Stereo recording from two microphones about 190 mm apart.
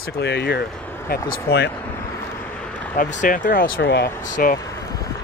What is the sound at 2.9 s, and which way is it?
Speech, 45° left (ahead or behind).